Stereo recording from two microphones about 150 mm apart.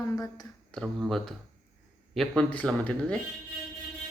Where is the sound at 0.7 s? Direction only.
5° left (ahead or behind).